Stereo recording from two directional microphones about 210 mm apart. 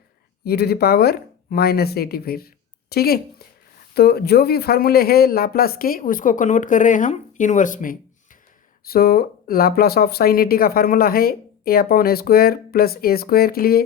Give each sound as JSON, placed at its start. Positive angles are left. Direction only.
{"t": 0.4, "sound": "speech", "side_deg": 50}